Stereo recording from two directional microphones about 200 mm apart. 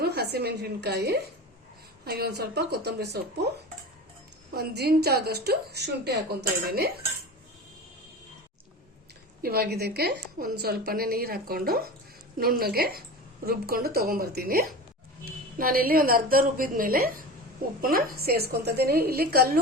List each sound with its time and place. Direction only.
0.0 s a woman's voice: 55° right (ahead or behind)
4.5 s a woman's voice: 55° right (ahead or behind)
9.4 s a woman's voice: 50° right (ahead or behind)